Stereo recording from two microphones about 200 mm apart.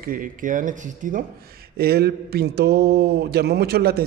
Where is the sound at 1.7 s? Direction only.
50° right (ahead or behind).